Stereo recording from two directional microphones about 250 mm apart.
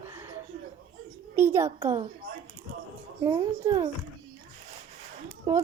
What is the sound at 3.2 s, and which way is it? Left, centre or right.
Speech, centre.